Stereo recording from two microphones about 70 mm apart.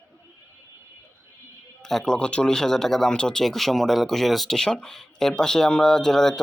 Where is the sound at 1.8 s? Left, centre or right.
Centre.